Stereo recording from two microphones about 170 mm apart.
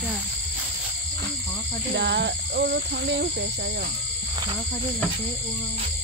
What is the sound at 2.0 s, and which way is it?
Speech, 85° right.